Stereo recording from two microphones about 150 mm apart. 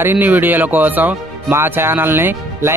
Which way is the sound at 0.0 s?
15° right (ahead or behind).